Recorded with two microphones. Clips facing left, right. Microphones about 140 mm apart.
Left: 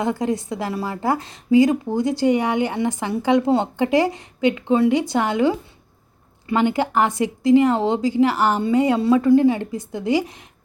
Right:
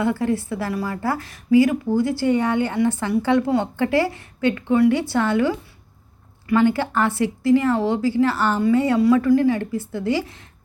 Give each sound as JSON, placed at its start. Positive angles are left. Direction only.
{"t": 0.0, "sound": "a woman's voice", "side_deg": 20}